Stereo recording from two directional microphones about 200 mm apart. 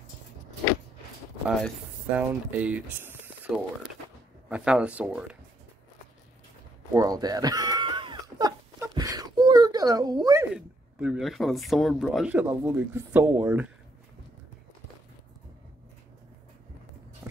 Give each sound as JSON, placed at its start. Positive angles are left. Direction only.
{"t": 2.1, "sound": "speech", "side_deg": -5}
{"t": 6.9, "sound": "a sound", "side_deg": -15}
{"t": 10.5, "sound": "speech", "side_deg": -5}